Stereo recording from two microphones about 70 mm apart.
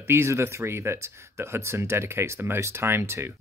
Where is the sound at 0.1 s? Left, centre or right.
Right.